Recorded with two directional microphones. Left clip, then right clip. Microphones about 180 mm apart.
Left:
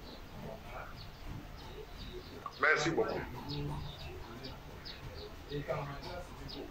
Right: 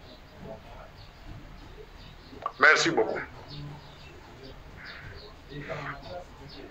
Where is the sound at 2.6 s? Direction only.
30° right (ahead or behind).